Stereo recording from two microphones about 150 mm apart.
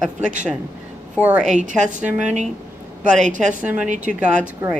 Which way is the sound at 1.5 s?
55° right (ahead or behind).